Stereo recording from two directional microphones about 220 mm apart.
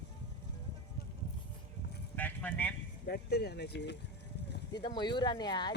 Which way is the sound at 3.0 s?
45° left (ahead or behind).